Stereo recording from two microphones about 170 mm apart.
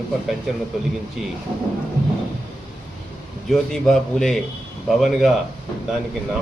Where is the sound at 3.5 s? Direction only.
Centre (ahead or behind).